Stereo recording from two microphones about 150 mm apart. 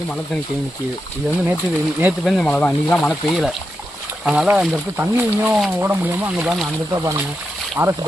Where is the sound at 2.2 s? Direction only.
5° left (ahead or behind).